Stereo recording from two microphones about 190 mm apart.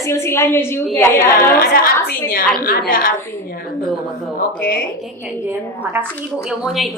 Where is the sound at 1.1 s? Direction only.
50° left (ahead or behind).